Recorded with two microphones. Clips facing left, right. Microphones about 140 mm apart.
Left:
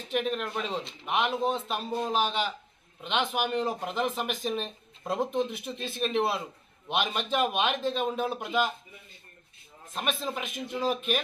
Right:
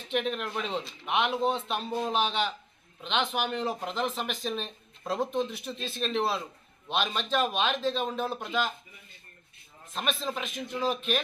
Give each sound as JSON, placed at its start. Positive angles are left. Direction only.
{"t": 0.1, "sound": "a man's voice", "side_deg": 5}
{"t": 3.3, "sound": "speech", "side_deg": 10}
{"t": 9.9, "sound": "speech", "side_deg": 10}